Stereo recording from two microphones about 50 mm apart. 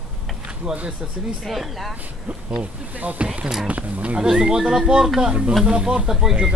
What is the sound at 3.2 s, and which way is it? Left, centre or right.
Speech, centre.